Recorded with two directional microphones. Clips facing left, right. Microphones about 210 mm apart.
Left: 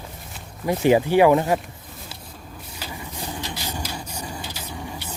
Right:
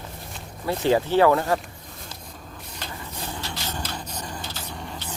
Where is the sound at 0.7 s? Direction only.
15° left (ahead or behind).